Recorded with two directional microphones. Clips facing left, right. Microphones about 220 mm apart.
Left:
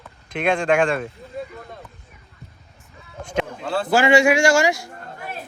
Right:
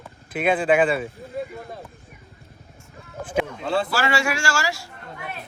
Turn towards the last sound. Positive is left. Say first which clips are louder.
# left 9 dB
turn(degrees=15)  # may be behind; listen again after turning